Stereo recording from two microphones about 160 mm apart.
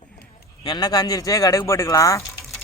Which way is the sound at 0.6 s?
25° left (ahead or behind).